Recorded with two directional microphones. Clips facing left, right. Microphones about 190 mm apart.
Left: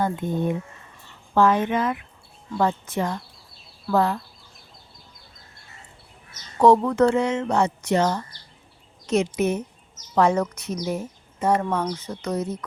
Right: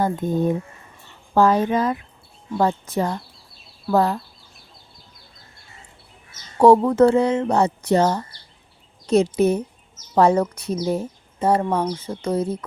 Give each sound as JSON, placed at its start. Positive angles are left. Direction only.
{"t": 0.0, "sound": "speech", "side_deg": -40}
{"t": 6.8, "sound": "speech", "side_deg": -35}